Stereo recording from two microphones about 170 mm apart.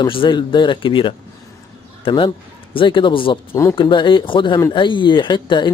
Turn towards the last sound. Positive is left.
turn(degrees=25)  # may be behind; listen again after turning